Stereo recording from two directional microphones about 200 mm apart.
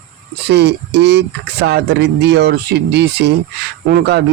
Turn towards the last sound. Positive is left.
turn(degrees=-55)  # may be behind; listen again after turning